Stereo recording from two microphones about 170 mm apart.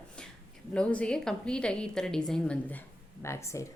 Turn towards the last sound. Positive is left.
turn(degrees=15)  # may be behind; listen again after turning